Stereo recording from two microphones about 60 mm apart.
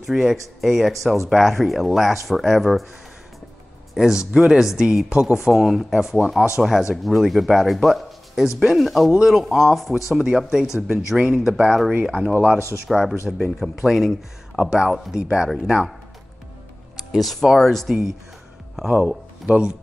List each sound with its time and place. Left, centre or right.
0.0 s speech: centre
3.9 s speech: centre
12.1 s speech: centre
12.8 s speech: centre
15.1 s speech: centre
16.9 s speech: centre
18.8 s speech: centre